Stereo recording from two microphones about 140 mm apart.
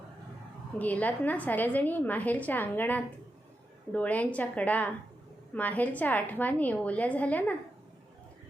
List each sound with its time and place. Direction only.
0.8 s a woman's voice: 10° left (ahead or behind)